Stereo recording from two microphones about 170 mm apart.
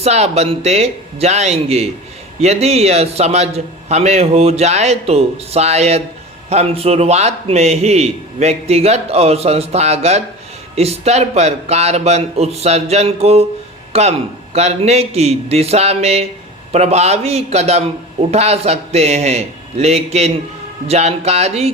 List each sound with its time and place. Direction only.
0.0 s a man's voice: 40° right (ahead or behind)